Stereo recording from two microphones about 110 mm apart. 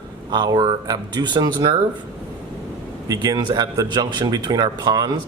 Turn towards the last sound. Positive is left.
turn(degrees=-40)  # may be behind; listen again after turning